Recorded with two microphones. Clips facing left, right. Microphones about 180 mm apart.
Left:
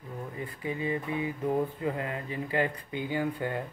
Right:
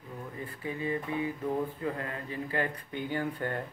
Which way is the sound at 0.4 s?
15° left (ahead or behind).